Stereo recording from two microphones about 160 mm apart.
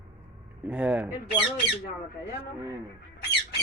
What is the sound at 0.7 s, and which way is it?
Speech, 10° right (ahead or behind).